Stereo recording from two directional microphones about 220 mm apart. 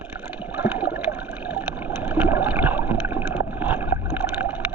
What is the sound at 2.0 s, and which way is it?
Boat, 10° right (ahead or behind).